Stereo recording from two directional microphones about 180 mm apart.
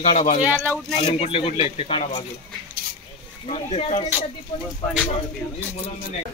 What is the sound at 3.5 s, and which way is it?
Speech, 35° left (ahead or behind).